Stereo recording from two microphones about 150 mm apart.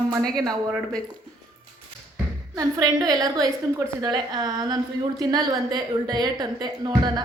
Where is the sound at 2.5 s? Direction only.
25° right (ahead or behind).